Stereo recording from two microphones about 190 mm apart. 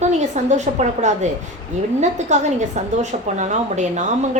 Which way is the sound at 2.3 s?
35° right (ahead or behind).